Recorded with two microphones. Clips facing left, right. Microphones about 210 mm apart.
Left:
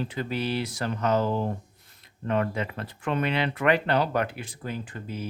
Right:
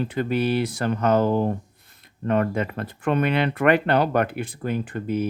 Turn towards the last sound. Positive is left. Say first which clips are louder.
# right 10 dB
turn(degrees=-60)  # may be behind; listen again after turning